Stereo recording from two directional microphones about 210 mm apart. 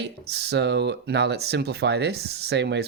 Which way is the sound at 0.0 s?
55° right (ahead or behind).